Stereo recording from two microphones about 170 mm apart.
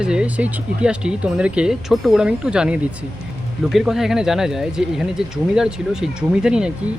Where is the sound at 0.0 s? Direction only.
5° right (ahead or behind).